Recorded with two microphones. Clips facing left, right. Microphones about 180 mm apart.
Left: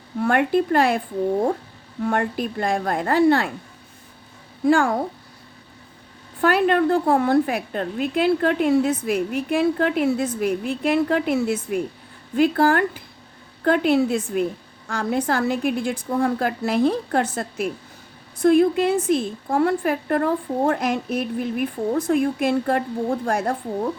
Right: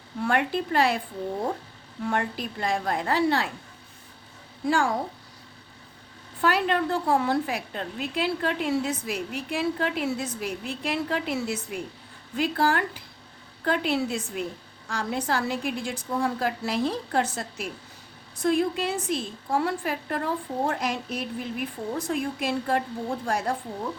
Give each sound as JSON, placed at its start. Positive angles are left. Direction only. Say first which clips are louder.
{"t": 0.2, "sound": "a woman's voice", "louder": "left 6 dB", "side_deg": 50}
{"t": 4.6, "sound": "a woman's voice", "louder": "left 7 dB", "side_deg": 55}
{"t": 6.4, "sound": "a woman's voice", "louder": "left 6 dB", "side_deg": 55}